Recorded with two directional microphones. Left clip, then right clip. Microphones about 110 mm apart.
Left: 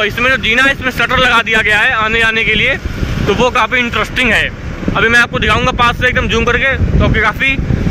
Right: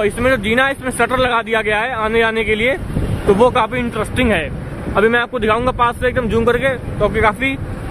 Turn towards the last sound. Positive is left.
turn(degrees=-30)  # may be behind; listen again after turning